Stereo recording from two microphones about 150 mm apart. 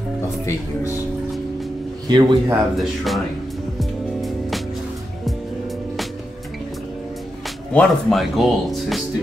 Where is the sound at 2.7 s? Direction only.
Centre (ahead or behind).